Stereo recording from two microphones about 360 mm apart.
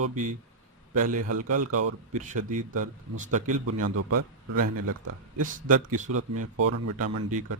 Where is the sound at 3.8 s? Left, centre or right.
Right.